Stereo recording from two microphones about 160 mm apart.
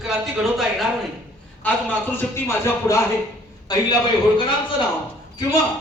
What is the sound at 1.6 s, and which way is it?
A man's voice, 10° left (ahead or behind).